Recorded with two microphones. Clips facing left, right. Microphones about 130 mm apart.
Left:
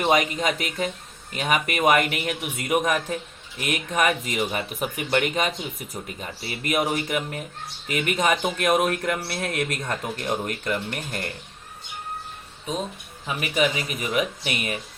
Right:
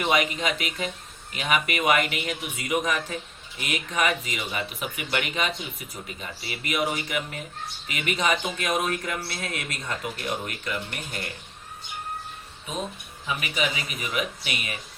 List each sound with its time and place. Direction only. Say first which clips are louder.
0.0 s speech: left 3 dB; 40° left (ahead or behind)
13.2 s speech: left 5 dB; 45° left (ahead or behind)